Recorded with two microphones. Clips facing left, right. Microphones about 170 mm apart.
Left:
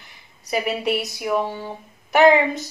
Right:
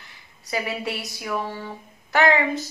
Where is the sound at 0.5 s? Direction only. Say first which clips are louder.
Left 5 dB; 20° left (ahead or behind).